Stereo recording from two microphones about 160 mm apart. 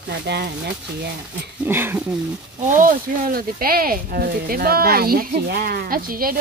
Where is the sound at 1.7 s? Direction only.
15° right (ahead or behind).